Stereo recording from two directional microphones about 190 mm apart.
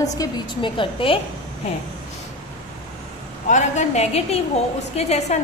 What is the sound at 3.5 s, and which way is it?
A woman's voice, 35° left (ahead or behind).